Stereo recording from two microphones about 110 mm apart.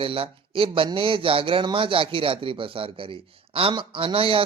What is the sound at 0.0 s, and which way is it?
Speech, 55° right (ahead or behind).